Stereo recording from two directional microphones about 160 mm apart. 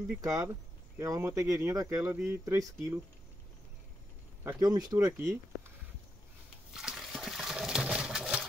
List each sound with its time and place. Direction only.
0.2 s speech: 15° right (ahead or behind)
4.4 s speech: 20° right (ahead or behind)
6.7 s a sound: 5° right (ahead or behind)